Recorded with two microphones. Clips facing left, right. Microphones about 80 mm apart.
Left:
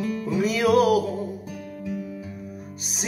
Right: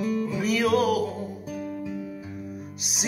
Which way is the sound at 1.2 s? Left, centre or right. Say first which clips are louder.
Left 1 dB; centre.